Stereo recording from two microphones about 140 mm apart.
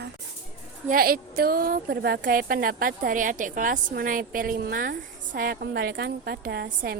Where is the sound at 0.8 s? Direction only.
90° right.